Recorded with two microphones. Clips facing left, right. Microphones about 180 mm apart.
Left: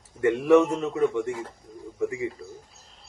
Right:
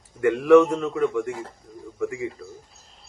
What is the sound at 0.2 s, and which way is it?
Speech, 25° left (ahead or behind).